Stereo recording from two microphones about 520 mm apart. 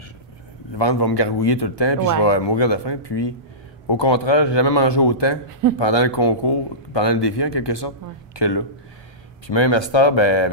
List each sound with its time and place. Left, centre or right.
0.7 s a man's voice: left